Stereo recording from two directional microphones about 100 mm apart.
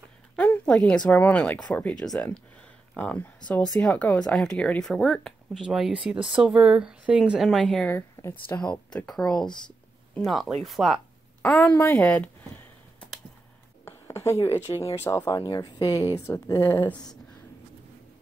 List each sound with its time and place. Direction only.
0.4 s a sound: 15° left (ahead or behind)
0.7 s speech: 5° left (ahead or behind)
7.9 s speech: 25° left (ahead or behind)
8.5 s speech: 10° left (ahead or behind)
11.4 s speech: 15° left (ahead or behind)
12.0 s a sound: 15° left (ahead or behind)
13.8 s a sound: 30° left (ahead or behind)
14.7 s speech: 30° left (ahead or behind)
16.6 s speech: 20° left (ahead or behind)